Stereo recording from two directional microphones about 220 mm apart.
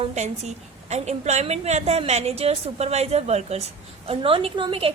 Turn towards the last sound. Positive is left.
turn(degrees=-25)  # may be behind; listen again after turning